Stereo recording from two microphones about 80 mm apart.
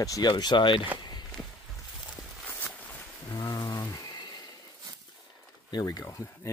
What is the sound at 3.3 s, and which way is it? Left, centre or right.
Speech, left.